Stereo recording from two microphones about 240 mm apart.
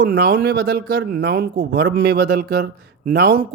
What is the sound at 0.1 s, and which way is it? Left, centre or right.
Speech, right.